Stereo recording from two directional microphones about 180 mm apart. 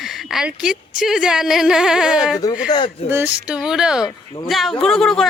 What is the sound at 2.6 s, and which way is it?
Speech, 25° left (ahead or behind).